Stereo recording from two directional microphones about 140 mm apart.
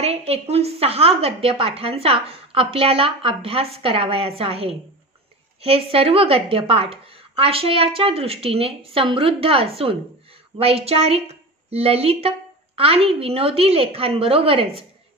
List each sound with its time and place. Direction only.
0.0 s a woman's voice: 45° right (ahead or behind)